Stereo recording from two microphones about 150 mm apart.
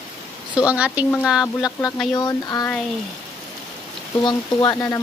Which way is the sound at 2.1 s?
25° left (ahead or behind).